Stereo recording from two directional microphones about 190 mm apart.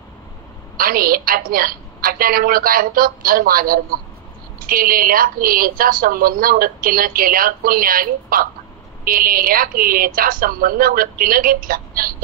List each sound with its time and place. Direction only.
0.7 s a woman's voice: 50° right (ahead or behind)